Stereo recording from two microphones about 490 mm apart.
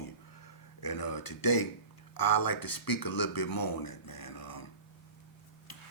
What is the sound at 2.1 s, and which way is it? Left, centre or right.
Speech, left.